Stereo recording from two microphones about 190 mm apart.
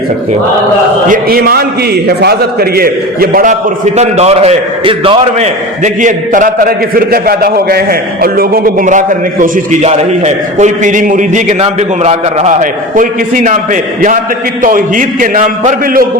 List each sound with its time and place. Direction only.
1.0 s a man's voice: 50° right (ahead or behind)
3.9 s a man's voice: 35° right (ahead or behind)
14.6 s a man's voice: 45° right (ahead or behind)